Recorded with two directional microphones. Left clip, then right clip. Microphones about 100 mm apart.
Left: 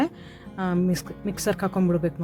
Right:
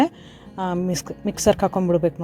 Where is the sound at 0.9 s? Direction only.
35° right (ahead or behind).